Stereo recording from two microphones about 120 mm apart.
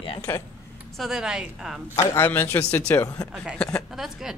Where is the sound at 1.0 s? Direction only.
5° right (ahead or behind).